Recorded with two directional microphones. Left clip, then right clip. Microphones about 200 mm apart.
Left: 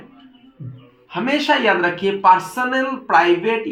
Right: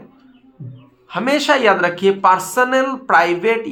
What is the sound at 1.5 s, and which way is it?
Speech, 35° right (ahead or behind).